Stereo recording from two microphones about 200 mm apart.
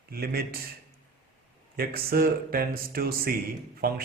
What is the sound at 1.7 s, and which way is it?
Speech, 50° right (ahead or behind).